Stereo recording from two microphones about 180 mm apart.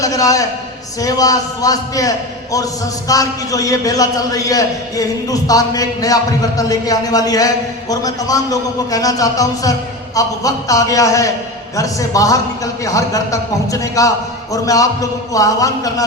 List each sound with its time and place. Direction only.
0.0 s a man's voice: 20° left (ahead or behind)